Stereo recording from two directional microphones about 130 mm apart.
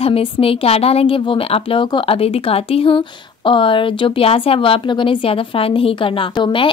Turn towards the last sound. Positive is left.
turn(degrees=40)  # may be behind; listen again after turning